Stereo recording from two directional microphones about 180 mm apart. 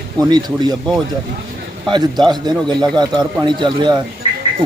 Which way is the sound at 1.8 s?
25° right (ahead or behind).